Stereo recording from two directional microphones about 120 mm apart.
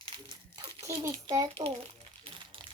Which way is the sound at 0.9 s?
25° right (ahead or behind).